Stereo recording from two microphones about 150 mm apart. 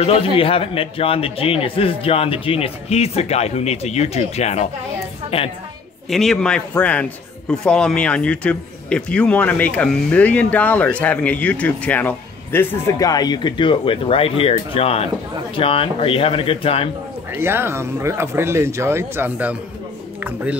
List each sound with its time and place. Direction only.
0.4 s a man's voice: 40° left (ahead or behind)
6.0 s a man's voice: centre (ahead or behind); by 16.9 s 40° left (ahead or behind)
17.3 s speech: 15° right (ahead or behind)